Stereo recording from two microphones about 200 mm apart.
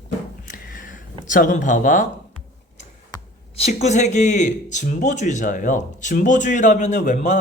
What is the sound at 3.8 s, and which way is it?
Speech, 35° left (ahead or behind).